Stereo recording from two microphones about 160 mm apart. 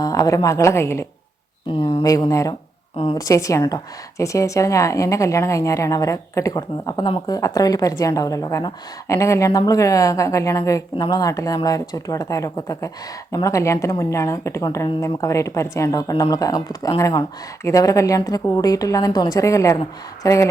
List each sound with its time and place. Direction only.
0.0 s a woman's voice: 20° left (ahead or behind)
1.8 s speech: 30° left (ahead or behind)
3.0 s a woman's voice: 35° left (ahead or behind)
3.2 s a woman's voice: 20° left (ahead or behind)